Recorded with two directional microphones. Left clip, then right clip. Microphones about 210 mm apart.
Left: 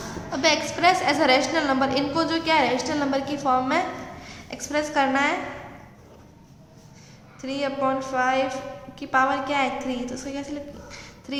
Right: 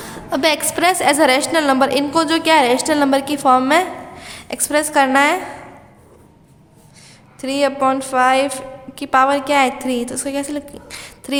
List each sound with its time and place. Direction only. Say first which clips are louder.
0.3 s a woman's voice: right 5 dB; 55° right (ahead or behind)
7.4 s a woman's voice: right 9 dB; 55° right (ahead or behind)